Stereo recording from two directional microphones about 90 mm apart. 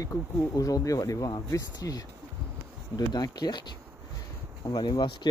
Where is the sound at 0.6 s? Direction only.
40° left (ahead or behind).